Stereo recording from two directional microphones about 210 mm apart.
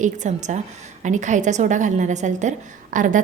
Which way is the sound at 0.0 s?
35° right (ahead or behind).